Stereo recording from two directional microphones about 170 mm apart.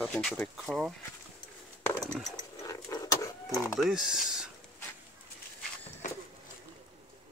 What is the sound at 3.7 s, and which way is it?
Speech, centre (ahead or behind).